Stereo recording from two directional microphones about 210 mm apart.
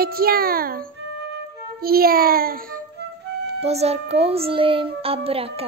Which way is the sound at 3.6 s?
30° right (ahead or behind).